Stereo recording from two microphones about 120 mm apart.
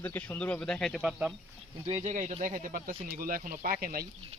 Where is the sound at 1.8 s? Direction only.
70° right (ahead or behind).